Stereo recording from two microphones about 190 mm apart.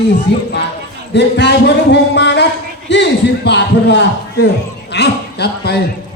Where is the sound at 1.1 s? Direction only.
65° left (ahead or behind).